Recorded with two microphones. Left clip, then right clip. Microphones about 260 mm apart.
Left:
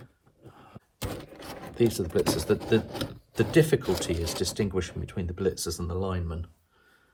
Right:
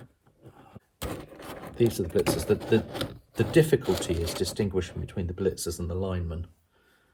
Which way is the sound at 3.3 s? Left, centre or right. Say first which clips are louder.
Even; centre.